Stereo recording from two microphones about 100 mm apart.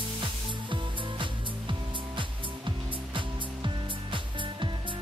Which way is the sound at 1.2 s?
55° right (ahead or behind).